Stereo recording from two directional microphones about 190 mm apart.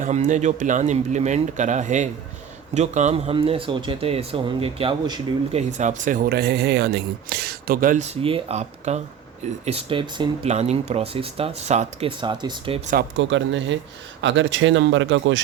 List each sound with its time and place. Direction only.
0.0 s speech: 40° right (ahead or behind); by 5.5 s 25° right (ahead or behind)
5.5 s speech: 40° right (ahead or behind)
13.1 s speech: 75° right (ahead or behind)